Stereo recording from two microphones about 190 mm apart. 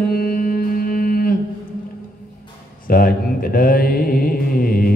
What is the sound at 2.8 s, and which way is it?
Mantra, 50° left (ahead or behind).